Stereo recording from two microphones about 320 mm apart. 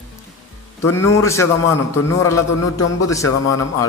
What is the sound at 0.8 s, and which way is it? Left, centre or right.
Speech, centre.